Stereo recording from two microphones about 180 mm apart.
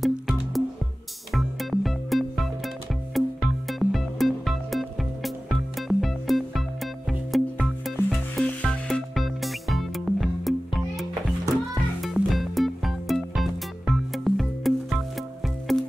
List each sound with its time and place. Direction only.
0.0 s music: centre (ahead or behind)